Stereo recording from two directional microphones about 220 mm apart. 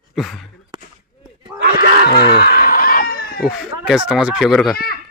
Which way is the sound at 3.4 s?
5° right (ahead or behind).